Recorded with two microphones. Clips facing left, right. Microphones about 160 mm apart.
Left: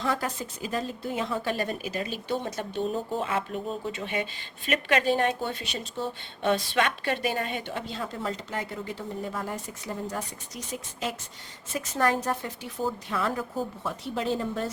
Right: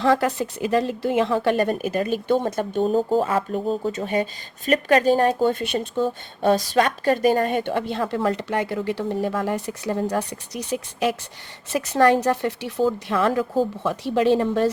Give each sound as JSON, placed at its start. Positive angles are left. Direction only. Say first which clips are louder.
{"t": 0.0, "sound": "a woman's voice", "louder": "right 10 dB", "side_deg": -70}
{"t": 6.4, "sound": "a woman's voice", "louder": "right 6 dB", "side_deg": -40}